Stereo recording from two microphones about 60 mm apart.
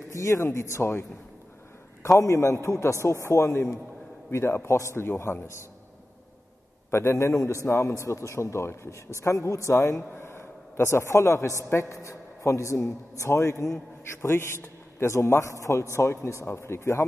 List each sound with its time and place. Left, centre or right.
0.1 s a man's voice: left
2.0 s a man's voice: left
6.9 s a man's voice: left
10.1 s a man's voice: left
14.2 s a man's voice: left
15.1 s a man's voice: left